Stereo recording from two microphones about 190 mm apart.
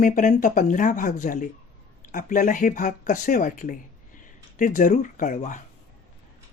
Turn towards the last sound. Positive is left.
turn(degrees=40)  # may be behind; listen again after turning